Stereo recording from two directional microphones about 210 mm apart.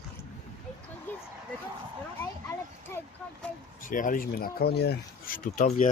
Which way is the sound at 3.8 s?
40° left (ahead or behind).